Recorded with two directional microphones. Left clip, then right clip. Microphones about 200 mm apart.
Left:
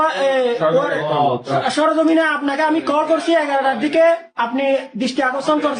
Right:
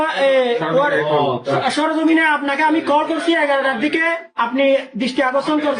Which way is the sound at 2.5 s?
20° left (ahead or behind).